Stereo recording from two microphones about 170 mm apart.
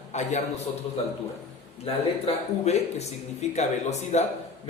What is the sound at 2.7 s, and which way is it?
Speech, 40° left (ahead or behind).